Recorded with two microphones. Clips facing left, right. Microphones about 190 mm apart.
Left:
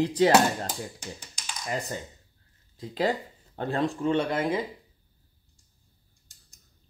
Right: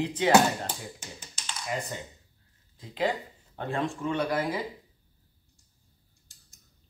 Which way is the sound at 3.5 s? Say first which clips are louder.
Left 3 dB; 35° left (ahead or behind).